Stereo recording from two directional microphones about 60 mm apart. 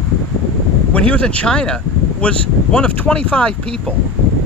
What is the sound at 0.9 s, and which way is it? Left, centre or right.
Speech, left.